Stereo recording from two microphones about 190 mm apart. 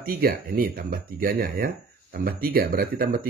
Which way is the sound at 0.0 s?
50° right (ahead or behind).